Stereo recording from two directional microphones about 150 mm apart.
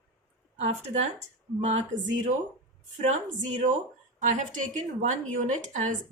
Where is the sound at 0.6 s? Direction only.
50° right (ahead or behind).